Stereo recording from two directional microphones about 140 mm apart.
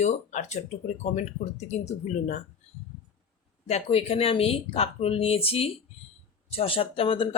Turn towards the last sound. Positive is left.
turn(degrees=40)  # may be behind; listen again after turning